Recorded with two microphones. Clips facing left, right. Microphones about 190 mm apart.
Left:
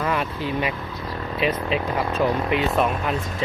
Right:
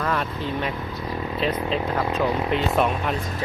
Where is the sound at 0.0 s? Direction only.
10° left (ahead or behind).